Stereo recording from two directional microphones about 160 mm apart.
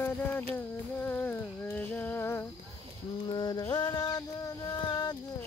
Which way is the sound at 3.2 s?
25° left (ahead or behind).